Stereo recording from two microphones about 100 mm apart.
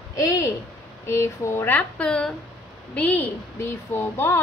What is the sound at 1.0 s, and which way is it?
A woman's voice, 25° left (ahead or behind).